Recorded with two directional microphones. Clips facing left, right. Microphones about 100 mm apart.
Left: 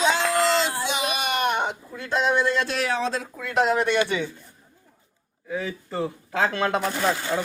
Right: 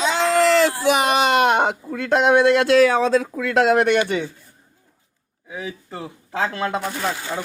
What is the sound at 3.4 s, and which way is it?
Speech, 90° right.